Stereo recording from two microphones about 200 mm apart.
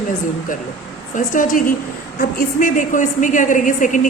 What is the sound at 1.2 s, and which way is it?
A woman's voice, 40° left (ahead or behind).